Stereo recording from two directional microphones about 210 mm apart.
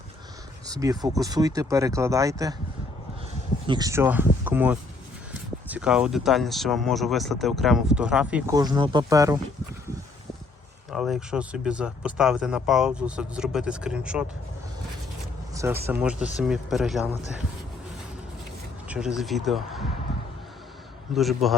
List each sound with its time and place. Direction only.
0.7 s speech: 15° right (ahead or behind)
3.7 s speech: 15° right (ahead or behind)
8.5 s speech: 20° right (ahead or behind)
10.9 s speech: centre (ahead or behind)
15.5 s speech: 10° right (ahead or behind)
18.9 s speech: 5° right (ahead or behind)
20.1 s basketball bounce: centre (ahead or behind)
21.1 s speech: centre (ahead or behind)